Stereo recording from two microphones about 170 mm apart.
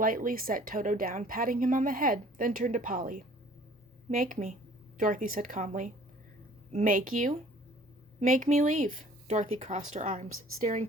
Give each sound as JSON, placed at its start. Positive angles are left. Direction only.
{"t": 0.0, "sound": "a woman's voice", "side_deg": -55}